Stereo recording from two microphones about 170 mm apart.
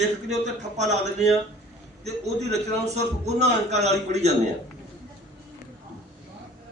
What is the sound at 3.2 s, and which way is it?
A man's voice, 40° right (ahead or behind).